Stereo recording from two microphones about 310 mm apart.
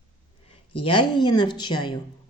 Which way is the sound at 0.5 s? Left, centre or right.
Centre.